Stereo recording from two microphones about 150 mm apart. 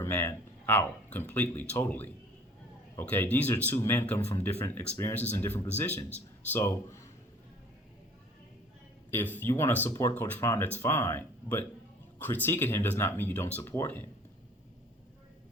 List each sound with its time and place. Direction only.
0.0 s speech: 15° left (ahead or behind)
9.0 s speech: 15° left (ahead or behind)